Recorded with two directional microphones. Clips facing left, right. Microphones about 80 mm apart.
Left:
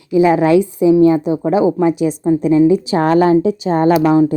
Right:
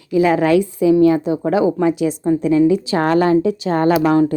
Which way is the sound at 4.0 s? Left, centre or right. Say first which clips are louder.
Left 2 dB; centre.